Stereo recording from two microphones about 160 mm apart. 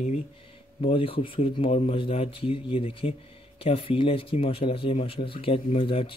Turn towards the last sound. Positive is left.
turn(degrees=35)  # may be behind; listen again after turning